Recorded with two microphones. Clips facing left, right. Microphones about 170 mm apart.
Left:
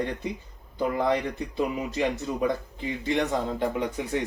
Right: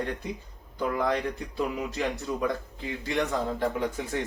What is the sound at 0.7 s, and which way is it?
Speech, 20° left (ahead or behind).